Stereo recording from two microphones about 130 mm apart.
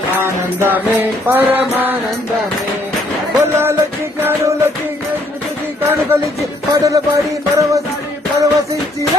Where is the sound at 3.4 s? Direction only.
20° right (ahead or behind).